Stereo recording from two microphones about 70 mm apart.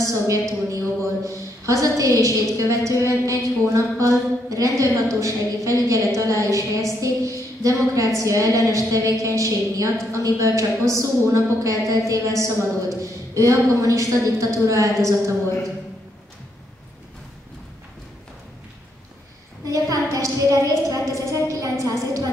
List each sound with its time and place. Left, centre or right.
0.0 s a woman's voice: right
19.6 s a woman's voice: right